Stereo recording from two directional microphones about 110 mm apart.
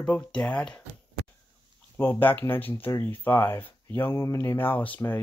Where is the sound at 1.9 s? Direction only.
20° left (ahead or behind).